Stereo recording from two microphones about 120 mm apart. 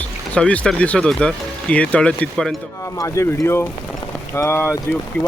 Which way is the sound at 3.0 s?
20° left (ahead or behind).